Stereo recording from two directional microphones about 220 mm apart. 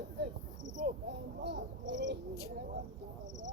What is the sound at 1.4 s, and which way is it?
Speech, 55° right (ahead or behind).